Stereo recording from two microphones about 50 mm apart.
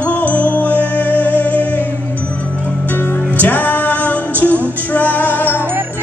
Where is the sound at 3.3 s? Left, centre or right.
Left.